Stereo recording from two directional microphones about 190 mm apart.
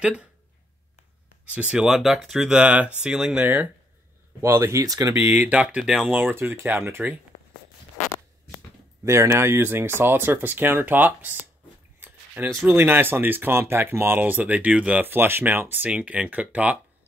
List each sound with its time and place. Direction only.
0.0 s speech: 5° right (ahead or behind)
1.5 s speech: 5° right (ahead or behind)
9.0 s speech: 15° right (ahead or behind)